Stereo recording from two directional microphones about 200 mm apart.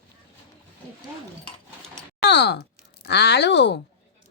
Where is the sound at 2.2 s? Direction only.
55° left (ahead or behind).